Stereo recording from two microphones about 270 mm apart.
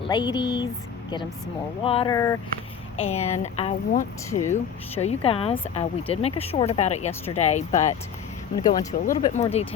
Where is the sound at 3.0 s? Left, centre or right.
Left.